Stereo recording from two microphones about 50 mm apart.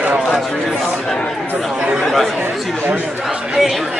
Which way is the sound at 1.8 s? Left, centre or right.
Centre.